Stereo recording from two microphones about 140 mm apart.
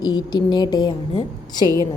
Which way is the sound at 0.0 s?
30° left (ahead or behind).